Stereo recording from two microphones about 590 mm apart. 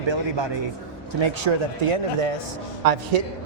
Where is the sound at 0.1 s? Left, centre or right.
Right.